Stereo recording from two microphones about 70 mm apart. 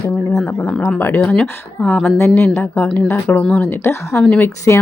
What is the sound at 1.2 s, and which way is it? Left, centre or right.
Speech, centre.